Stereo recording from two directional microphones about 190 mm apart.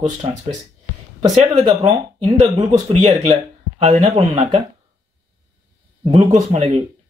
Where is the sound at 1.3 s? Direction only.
35° right (ahead or behind).